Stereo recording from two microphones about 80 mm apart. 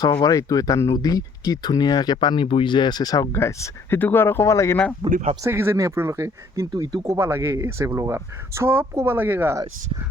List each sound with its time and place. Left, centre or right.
0.0 s speech: left
3.3 s speech: left
5.0 s speech: right
5.5 s speech: right